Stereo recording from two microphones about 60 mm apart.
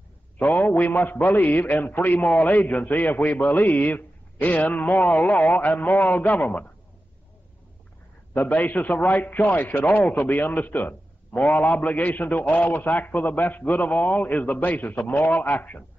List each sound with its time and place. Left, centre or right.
0.4 s a man's voice: left
8.3 s a man's voice: left